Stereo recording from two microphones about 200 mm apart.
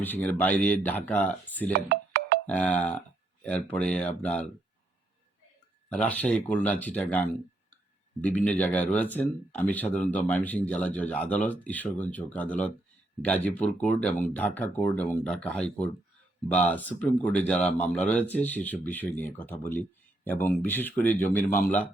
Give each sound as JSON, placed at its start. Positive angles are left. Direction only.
{"t": 0.0, "sound": "speech", "side_deg": 10}
{"t": 1.7, "sound": "music", "side_deg": -55}
{"t": 2.5, "sound": "speech", "side_deg": 5}
{"t": 5.9, "sound": "speech", "side_deg": 5}